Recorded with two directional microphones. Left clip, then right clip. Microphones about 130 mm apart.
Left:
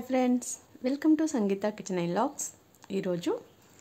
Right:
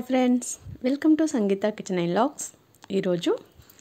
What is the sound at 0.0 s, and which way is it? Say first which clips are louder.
Speech: right 4 dB; 25° right (ahead or behind).